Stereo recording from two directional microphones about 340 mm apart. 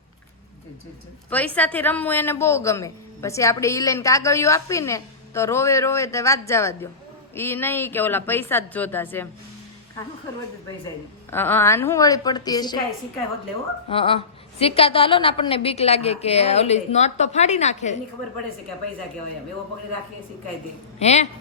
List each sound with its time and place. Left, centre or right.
1.3 s a woman's voice: centre
11.3 s a woman's voice: centre
13.8 s a woman's voice: centre
21.0 s speech: centre